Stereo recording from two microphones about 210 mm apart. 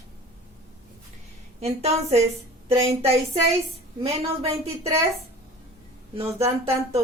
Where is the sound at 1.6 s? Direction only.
30° right (ahead or behind).